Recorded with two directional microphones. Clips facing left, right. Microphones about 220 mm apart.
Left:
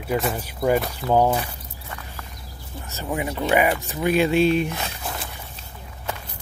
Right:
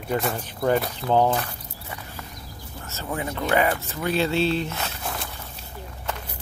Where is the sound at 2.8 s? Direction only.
15° left (ahead or behind).